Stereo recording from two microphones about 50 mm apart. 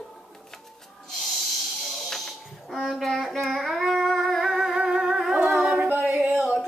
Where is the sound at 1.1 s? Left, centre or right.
Centre.